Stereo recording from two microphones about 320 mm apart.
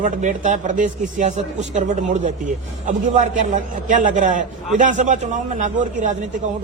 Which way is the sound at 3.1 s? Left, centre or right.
Right.